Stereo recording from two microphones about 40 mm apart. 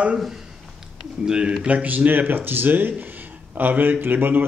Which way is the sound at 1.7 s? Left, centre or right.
Right.